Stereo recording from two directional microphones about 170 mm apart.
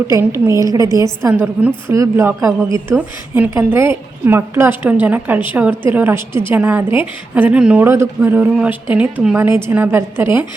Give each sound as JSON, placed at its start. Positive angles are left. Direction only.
{"t": 0.1, "sound": "a woman's voice", "side_deg": -15}
{"t": 1.2, "sound": "a woman's voice", "side_deg": -10}